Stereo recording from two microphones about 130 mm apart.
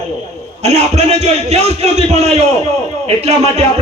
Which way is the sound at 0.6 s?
60° right (ahead or behind).